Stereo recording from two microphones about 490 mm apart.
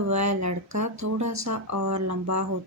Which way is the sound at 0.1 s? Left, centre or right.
Right.